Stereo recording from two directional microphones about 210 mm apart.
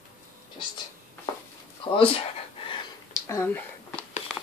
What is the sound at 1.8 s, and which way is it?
Speech, 25° left (ahead or behind).